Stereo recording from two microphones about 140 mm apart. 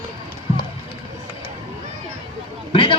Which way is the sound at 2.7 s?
40° left (ahead or behind).